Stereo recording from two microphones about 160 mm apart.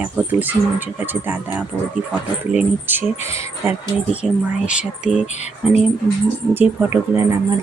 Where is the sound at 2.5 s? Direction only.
10° right (ahead or behind).